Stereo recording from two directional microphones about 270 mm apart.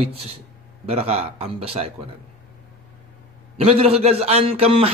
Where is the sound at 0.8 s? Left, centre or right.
Right.